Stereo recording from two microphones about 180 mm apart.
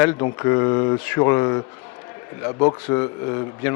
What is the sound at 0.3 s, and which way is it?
Speech, 20° left (ahead or behind).